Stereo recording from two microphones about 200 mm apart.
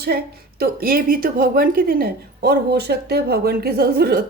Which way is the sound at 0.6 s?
50° right (ahead or behind).